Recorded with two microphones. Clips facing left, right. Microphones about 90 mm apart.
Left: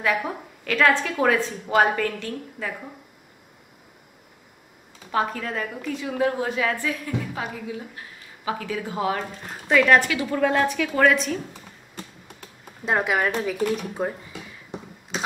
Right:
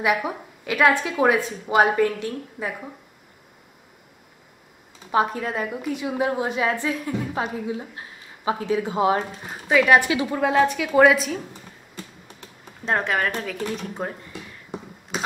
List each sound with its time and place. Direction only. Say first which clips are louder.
0.0 s a woman's voice: right 2 dB; 15° right (ahead or behind)
5.1 s a woman's voice: right 3 dB; 20° right (ahead or behind)
9.7 s a woman's voice: right 1 dB; 5° right (ahead or behind)
10.0 s a woman's voice: even; 20° right (ahead or behind)
12.8 s speech: left 1 dB; 5° left (ahead or behind)